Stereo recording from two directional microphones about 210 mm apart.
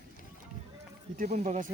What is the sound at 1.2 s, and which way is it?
Speech, 35° right (ahead or behind).